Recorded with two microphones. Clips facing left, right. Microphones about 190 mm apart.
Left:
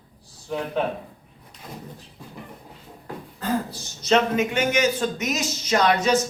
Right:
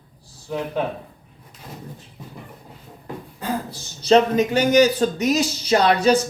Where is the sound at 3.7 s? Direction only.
35° right (ahead or behind).